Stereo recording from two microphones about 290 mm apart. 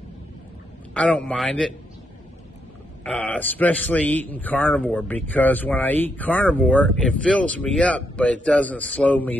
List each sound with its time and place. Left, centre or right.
0.9 s speech: centre
3.0 s speech: centre